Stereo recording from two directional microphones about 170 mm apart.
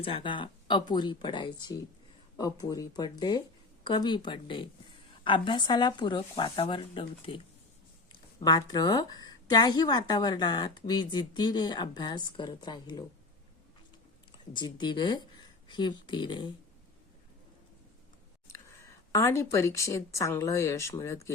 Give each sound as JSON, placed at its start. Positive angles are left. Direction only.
{"t": 0.0, "sound": "a woman's voice", "side_deg": 30}
{"t": 14.5, "sound": "a woman's voice", "side_deg": 25}
{"t": 18.4, "sound": "speech", "side_deg": 15}